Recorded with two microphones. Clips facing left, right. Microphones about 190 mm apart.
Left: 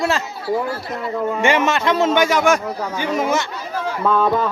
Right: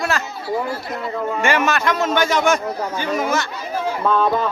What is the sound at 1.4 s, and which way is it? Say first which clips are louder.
Speech: left 1 dB; 20° left (ahead or behind).